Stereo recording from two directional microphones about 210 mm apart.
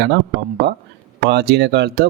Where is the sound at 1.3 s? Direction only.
55° right (ahead or behind).